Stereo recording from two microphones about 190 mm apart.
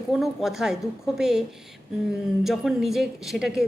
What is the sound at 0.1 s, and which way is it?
A woman's voice, centre (ahead or behind).